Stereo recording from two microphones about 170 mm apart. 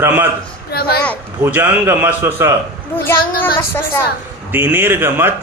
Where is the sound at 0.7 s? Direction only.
65° left (ahead or behind).